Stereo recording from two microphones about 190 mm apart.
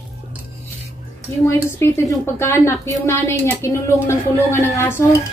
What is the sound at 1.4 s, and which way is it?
Speech, 15° left (ahead or behind).